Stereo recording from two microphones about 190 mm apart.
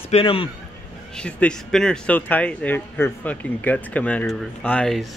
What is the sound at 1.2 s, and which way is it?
Speech, 5° left (ahead or behind).